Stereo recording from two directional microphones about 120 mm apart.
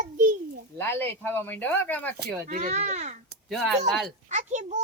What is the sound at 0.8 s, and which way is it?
Speech, 20° left (ahead or behind).